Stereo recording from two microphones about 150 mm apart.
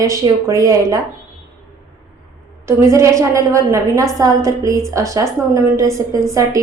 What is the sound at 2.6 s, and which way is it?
A woman's voice, 20° right (ahead or behind).